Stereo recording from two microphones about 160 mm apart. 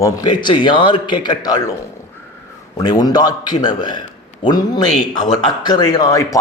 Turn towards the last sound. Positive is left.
turn(degrees=20)  # may be behind; listen again after turning